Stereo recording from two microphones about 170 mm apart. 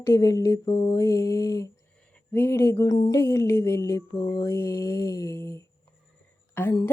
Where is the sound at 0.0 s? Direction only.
20° left (ahead or behind).